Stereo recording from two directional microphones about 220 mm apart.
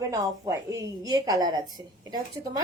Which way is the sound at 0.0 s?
15° right (ahead or behind).